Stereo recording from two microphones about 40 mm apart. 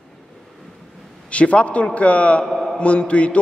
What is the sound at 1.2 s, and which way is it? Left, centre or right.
A man's voice, left.